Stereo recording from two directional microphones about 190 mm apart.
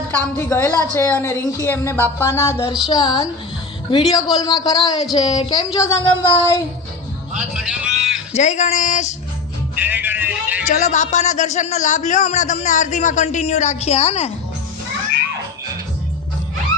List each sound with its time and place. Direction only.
0.1 s a man's voice: 10° left (ahead or behind)
7.3 s music: 5° right (ahead or behind)
8.3 s a man's voice: 35° left (ahead or behind)
9.7 s music: 10° right (ahead or behind)
10.7 s a man's voice: 40° left (ahead or behind)